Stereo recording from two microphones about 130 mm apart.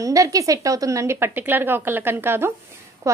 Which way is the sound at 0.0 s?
25° right (ahead or behind).